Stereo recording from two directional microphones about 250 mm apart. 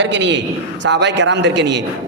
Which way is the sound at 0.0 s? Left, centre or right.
Right.